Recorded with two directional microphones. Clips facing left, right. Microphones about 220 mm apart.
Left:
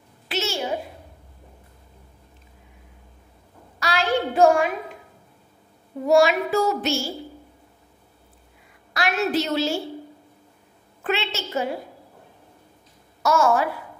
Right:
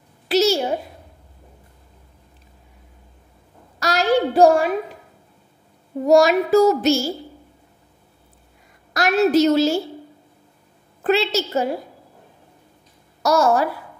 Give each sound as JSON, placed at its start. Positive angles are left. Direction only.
{"t": 0.3, "sound": "a sound", "side_deg": -40}
{"t": 3.8, "sound": "child singing", "side_deg": -40}
{"t": 6.0, "sound": "child singing", "side_deg": -40}
{"t": 8.9, "sound": "a woman's voice", "side_deg": -40}
{"t": 11.1, "sound": "child singing", "side_deg": -40}
{"t": 13.2, "sound": "child singing", "side_deg": -40}